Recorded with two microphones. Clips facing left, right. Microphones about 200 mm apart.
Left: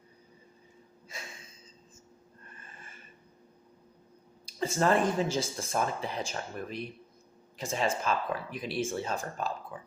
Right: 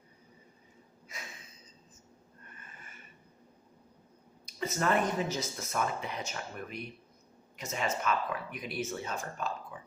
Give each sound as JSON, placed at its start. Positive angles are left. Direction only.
{"t": 2.6, "sound": "snort", "side_deg": 30}
{"t": 4.4, "sound": "speech", "side_deg": 30}